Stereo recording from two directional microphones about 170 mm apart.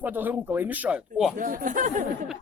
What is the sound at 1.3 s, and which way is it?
Speech, 55° right (ahead or behind).